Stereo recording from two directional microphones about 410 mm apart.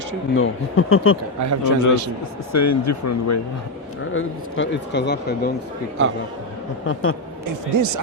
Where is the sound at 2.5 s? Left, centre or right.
Left.